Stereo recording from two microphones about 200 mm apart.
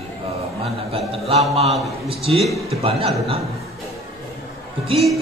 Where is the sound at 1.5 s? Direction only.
30° right (ahead or behind).